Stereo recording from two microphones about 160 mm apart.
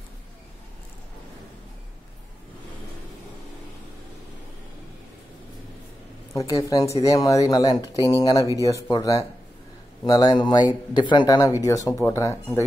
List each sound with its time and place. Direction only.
6.3 s speech: 20° left (ahead or behind)